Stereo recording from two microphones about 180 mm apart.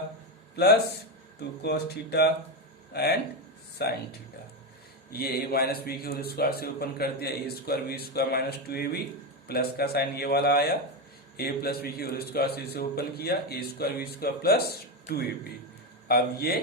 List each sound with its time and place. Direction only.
0.5 s a man's voice: 65° left (ahead or behind)
5.1 s a man's voice: 60° left (ahead or behind)
16.0 s a man's voice: 60° left (ahead or behind)